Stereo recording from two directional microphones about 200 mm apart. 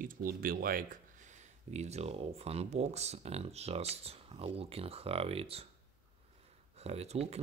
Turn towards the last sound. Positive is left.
turn(degrees=-30)  # may be behind; listen again after turning